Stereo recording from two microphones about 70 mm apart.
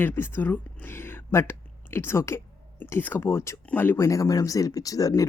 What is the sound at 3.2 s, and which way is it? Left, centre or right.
Speech, left.